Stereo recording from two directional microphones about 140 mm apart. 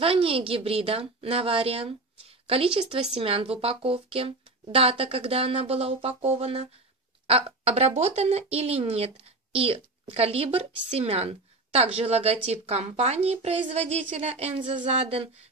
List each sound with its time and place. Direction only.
0.0 s a woman's voice: 40° right (ahead or behind)